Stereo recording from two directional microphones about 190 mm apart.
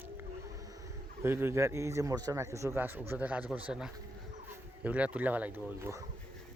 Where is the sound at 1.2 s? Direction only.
10° right (ahead or behind).